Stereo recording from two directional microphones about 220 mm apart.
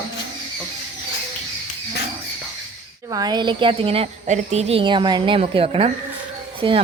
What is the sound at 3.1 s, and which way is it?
A woman's voice, 20° right (ahead or behind).